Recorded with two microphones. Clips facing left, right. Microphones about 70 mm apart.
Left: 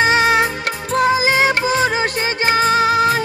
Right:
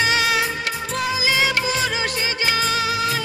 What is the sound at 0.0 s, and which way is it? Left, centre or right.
Music, left.